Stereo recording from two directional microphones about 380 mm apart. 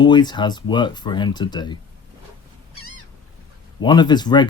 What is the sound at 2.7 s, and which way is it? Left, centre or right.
Cat, right.